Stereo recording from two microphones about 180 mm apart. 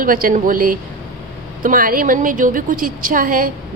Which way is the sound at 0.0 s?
50° right (ahead or behind).